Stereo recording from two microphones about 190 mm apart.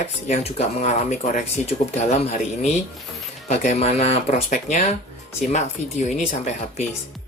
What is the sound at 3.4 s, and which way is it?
A man's voice, 35° left (ahead or behind).